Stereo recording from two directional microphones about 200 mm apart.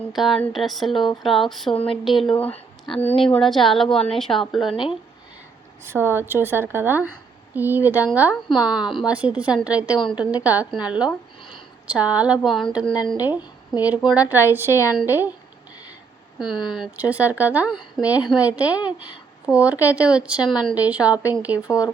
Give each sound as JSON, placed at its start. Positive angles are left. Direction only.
{"t": 0.1, "sound": "a woman's voice", "side_deg": 0}
{"t": 5.8, "sound": "speech", "side_deg": -10}
{"t": 8.4, "sound": "a woman's voice", "side_deg": 25}
{"t": 9.0, "sound": "a woman's voice", "side_deg": -5}
{"t": 16.7, "sound": "speech", "side_deg": -5}